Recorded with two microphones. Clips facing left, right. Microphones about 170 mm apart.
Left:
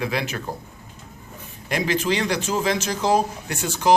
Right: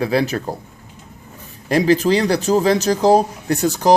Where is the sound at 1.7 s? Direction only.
35° right (ahead or behind).